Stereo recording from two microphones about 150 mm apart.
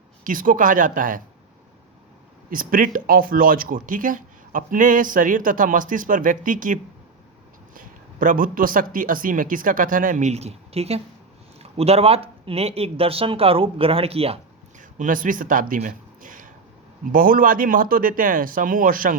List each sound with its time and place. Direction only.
0.3 s speech: 65° right (ahead or behind)
2.5 s speech: 70° right (ahead or behind); by 14.3 s 40° right (ahead or behind)
14.8 s speech: 60° right (ahead or behind)